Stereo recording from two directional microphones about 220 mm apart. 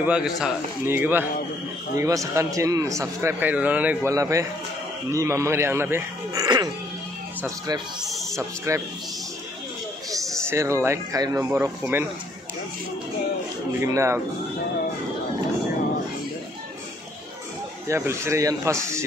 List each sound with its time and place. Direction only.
0.0 s a man's voice: 5° right (ahead or behind)
8.0 s music: centre (ahead or behind)
8.4 s a man's voice: 15° right (ahead or behind)
10.1 s a man's voice: 15° right (ahead or behind)
13.7 s a man's voice: 10° right (ahead or behind)
17.8 s a man's voice: 10° right (ahead or behind)